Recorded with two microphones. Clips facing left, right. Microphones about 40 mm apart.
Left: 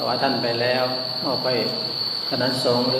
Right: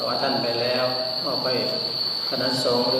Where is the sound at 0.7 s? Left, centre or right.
Centre.